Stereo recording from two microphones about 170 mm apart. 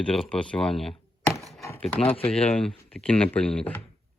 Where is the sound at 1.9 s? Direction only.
35° left (ahead or behind).